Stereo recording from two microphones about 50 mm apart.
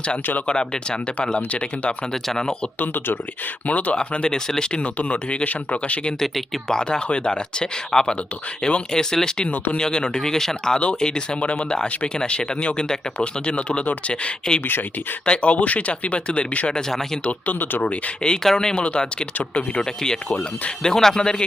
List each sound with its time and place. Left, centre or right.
0.4 s speech: centre
2.2 s speech: centre
2.8 s speech: left
3.7 s speech: left
3.9 s speech: centre
6.1 s speech: centre
10.8 s speech: left
17.2 s speech: left
17.8 s speech: centre